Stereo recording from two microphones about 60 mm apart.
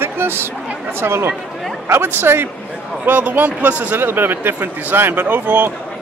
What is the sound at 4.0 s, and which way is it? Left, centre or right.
A man's voice, right.